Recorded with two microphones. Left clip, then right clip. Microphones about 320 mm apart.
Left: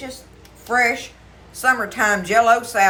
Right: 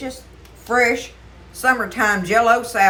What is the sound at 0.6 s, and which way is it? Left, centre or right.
Speech, centre.